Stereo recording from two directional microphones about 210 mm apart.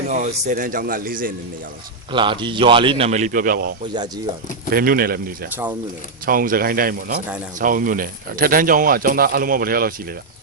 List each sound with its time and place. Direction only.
0.1 s a man's voice: 35° right (ahead or behind)
2.1 s a man's voice: 25° right (ahead or behind); by 3.7 s 45° right (ahead or behind)
4.7 s speech: 45° right (ahead or behind)